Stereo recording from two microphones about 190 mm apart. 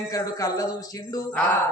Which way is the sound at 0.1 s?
20° left (ahead or behind).